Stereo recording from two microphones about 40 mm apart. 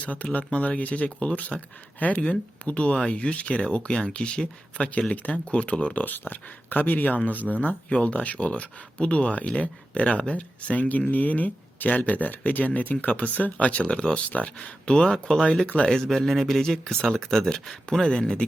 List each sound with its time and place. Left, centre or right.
0.0 s speech: left
6.1 s speech: left
15.9 s speech: centre